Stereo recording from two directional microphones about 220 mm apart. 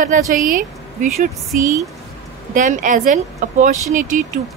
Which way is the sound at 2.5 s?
35° right (ahead or behind).